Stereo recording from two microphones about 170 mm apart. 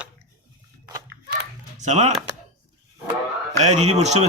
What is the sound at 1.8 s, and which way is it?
Speech, 40° right (ahead or behind).